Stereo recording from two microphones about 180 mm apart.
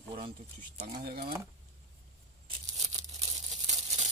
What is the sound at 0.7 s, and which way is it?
Speech, 40° right (ahead or behind).